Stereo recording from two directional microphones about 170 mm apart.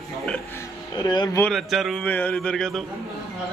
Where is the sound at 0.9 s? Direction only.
25° left (ahead or behind).